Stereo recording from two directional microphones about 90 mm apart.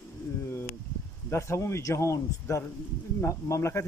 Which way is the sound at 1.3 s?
30° left (ahead or behind).